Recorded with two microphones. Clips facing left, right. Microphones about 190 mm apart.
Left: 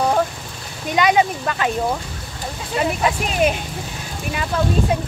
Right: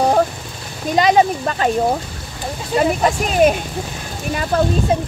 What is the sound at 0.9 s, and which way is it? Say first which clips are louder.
Speech: right 3 dB; 35° right (ahead or behind).